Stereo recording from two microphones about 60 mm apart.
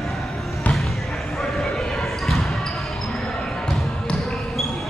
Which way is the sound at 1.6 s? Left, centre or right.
Centre.